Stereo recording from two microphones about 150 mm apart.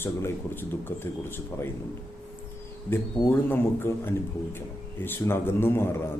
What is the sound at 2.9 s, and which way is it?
Speech, 15° left (ahead or behind).